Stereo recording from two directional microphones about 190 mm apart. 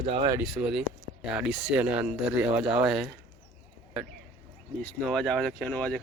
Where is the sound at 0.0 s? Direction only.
25° right (ahead or behind).